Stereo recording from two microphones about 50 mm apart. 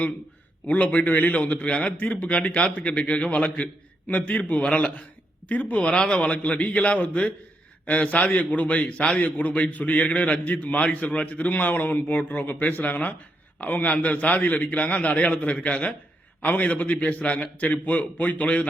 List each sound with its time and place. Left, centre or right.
0.7 s a man's voice: left
5.9 s a man's voice: centre